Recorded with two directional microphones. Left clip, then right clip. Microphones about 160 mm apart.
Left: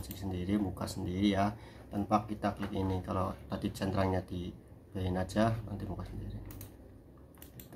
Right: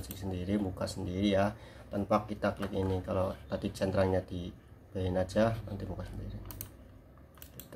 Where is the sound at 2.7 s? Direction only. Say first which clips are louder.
Right 3 dB; 5° right (ahead or behind).